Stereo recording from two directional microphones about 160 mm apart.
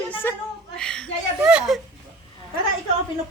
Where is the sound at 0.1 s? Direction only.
15° left (ahead or behind); by 1.8 s 5° right (ahead or behind).